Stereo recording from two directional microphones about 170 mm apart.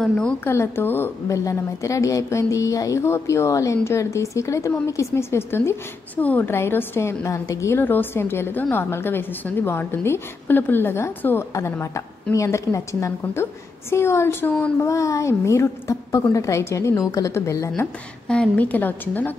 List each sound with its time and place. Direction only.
0.0 s a woman's voice: 5° left (ahead or behind)